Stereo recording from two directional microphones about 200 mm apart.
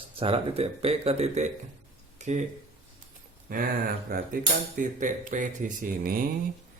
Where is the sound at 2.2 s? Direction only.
35° right (ahead or behind).